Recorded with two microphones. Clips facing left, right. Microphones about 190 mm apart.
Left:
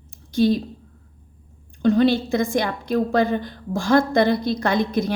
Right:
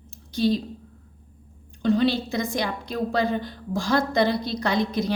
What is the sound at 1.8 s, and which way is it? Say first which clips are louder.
A woman's voice: left 4 dB; 50° left (ahead or behind).